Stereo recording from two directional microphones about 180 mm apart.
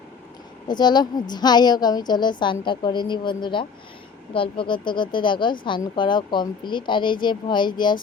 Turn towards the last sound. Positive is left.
turn(degrees=25)  # may be behind; listen again after turning